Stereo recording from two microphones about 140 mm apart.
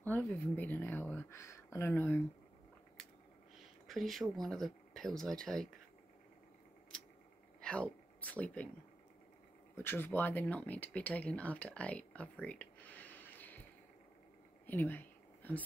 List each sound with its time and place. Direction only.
0.0 s speech: 15° left (ahead or behind)
3.8 s speech: centre (ahead or behind)
7.6 s speech: 10° left (ahead or behind)
9.8 s speech: 15° left (ahead or behind)
14.7 s whispering: 15° left (ahead or behind)